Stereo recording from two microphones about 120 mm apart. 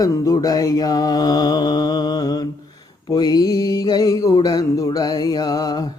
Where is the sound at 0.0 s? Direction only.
30° left (ahead or behind).